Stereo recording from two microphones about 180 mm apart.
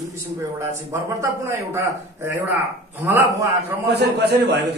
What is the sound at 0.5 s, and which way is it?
Speech, 15° right (ahead or behind).